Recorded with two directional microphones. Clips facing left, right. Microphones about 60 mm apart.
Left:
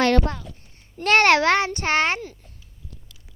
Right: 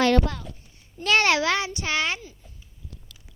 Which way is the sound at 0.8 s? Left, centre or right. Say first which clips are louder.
Left 4 dB; left.